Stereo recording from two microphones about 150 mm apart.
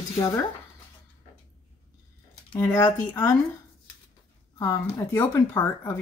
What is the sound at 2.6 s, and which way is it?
Speech, 15° left (ahead or behind).